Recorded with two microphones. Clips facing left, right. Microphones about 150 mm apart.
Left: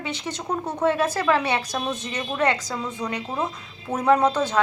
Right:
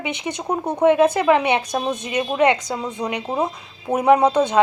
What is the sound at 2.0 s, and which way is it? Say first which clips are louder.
A woman's voice: right 7 dB; 15° right (ahead or behind).